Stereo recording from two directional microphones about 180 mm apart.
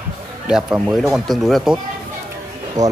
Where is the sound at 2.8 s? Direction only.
40° right (ahead or behind).